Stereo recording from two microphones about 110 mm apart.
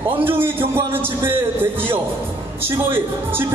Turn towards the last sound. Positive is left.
turn(degrees=-20)  # may be behind; listen again after turning